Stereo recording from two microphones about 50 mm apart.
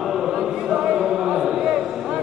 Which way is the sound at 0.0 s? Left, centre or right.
Centre.